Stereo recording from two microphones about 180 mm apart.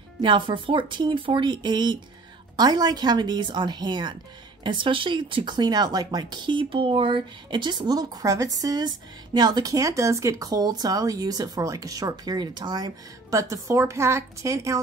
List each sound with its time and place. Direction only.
0.2 s speech: 30° right (ahead or behind)